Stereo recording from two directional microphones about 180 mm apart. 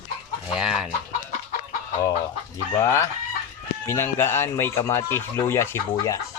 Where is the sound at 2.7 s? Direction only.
15° left (ahead or behind).